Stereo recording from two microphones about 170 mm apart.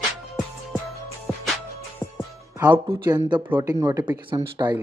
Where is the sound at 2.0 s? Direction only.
10° left (ahead or behind).